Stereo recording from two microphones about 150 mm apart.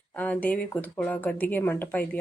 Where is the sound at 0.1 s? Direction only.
10° left (ahead or behind).